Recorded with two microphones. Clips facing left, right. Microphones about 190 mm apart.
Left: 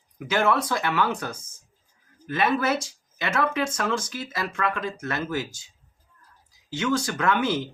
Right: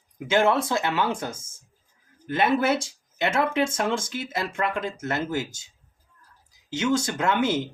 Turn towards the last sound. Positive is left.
turn(degrees=-25)  # may be behind; listen again after turning